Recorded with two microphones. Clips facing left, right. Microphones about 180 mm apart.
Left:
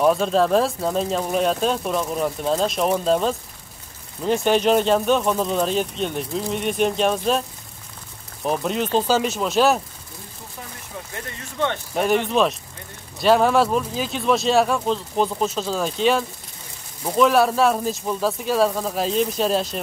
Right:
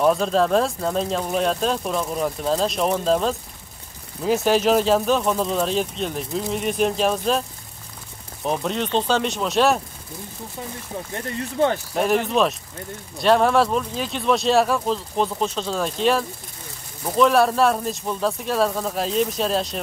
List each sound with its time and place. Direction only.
0.0 s speech: centre (ahead or behind)
8.5 s speech: 5° left (ahead or behind)
11.1 s speech: 35° right (ahead or behind)
11.9 s speech: centre (ahead or behind)